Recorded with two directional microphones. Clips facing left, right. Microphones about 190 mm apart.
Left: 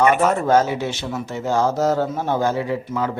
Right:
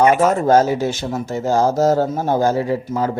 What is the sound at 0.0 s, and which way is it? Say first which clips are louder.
Speech: right 3 dB; 40° right (ahead or behind).